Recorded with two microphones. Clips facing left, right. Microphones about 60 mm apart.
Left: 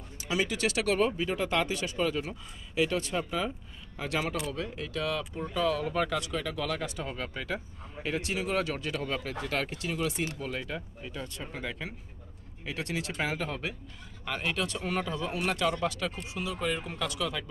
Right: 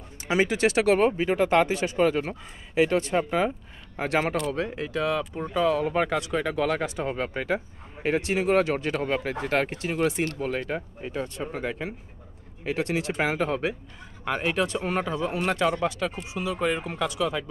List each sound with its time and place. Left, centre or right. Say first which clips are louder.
0.3 s speech: right 7 dB; right